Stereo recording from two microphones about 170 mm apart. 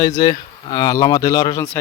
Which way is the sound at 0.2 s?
25° left (ahead or behind).